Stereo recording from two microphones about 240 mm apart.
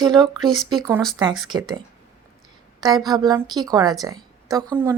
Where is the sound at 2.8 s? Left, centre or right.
Centre.